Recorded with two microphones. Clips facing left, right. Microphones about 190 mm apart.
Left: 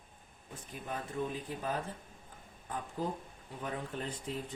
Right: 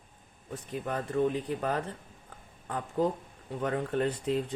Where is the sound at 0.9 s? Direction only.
70° right (ahead or behind).